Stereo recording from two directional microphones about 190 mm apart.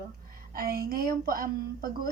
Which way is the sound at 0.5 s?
55° right (ahead or behind).